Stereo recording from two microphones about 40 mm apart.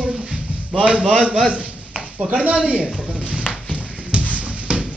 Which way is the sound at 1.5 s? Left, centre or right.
Right.